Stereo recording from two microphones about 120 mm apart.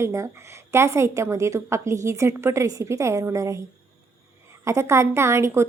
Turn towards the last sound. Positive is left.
turn(degrees=-20)  # may be behind; listen again after turning